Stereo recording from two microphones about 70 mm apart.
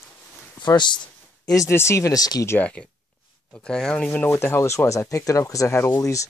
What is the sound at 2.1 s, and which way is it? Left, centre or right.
Speech, left.